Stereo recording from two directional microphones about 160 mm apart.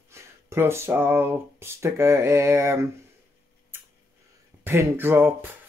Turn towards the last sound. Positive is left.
turn(degrees=-15)  # may be behind; listen again after turning